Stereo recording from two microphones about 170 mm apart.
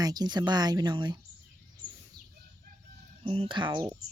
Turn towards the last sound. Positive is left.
turn(degrees=-30)  # may be behind; listen again after turning